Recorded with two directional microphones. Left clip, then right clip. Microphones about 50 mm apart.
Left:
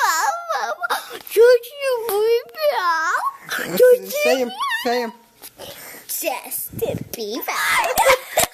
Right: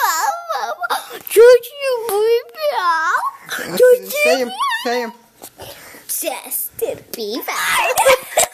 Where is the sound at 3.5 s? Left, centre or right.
Left.